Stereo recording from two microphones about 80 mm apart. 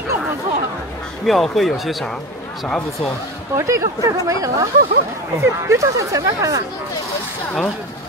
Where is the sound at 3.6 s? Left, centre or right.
Right.